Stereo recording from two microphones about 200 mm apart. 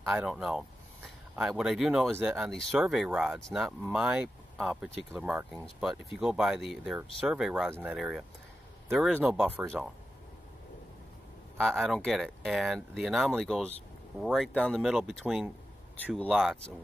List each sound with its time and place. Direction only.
0.0 s speech: centre (ahead or behind)
11.5 s speech: centre (ahead or behind)